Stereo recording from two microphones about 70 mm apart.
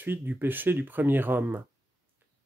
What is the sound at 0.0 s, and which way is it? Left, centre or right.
Speech, right.